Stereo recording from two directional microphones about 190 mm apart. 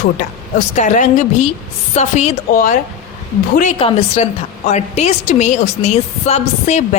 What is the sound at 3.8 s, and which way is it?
A woman's voice, 30° left (ahead or behind).